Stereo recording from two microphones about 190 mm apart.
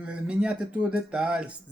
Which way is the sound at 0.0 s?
5° right (ahead or behind).